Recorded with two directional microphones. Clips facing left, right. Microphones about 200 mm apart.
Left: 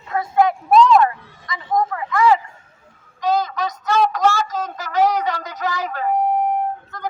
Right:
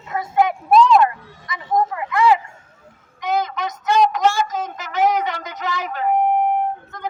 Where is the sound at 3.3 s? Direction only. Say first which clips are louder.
Right 2 dB; 20° right (ahead or behind).